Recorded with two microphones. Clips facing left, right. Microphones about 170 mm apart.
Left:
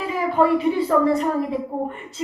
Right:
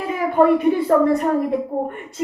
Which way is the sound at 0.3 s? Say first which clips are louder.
Right 4 dB; 55° right (ahead or behind).